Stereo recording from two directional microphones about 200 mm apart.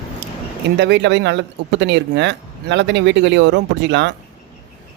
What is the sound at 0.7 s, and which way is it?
Speech, 60° right (ahead or behind).